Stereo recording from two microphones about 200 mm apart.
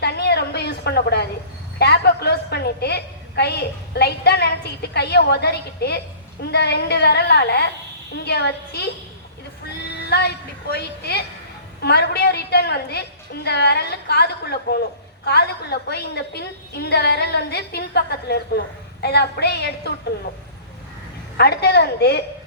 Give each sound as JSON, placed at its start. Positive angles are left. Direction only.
{"t": 0.0, "sound": "a sound", "side_deg": 55}
{"t": 1.8, "sound": "a woman's voice", "side_deg": 55}
{"t": 21.3, "sound": "a woman's voice", "side_deg": 55}